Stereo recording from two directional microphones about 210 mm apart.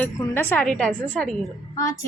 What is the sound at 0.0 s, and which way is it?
A woman's voice, 10° left (ahead or behind).